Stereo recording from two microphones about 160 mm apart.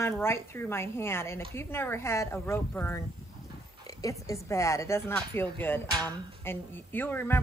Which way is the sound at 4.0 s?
20° left (ahead or behind).